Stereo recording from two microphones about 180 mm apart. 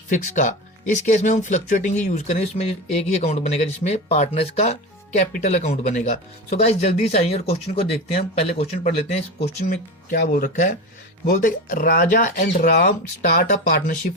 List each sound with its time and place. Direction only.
0.1 s speech: 45° left (ahead or behind)
9.4 s speech: 55° left (ahead or behind)